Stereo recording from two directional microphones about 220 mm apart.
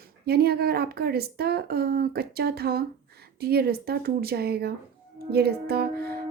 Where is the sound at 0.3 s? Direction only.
45° right (ahead or behind).